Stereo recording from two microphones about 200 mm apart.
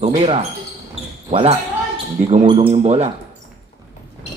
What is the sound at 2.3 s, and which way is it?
Speech, 40° right (ahead or behind).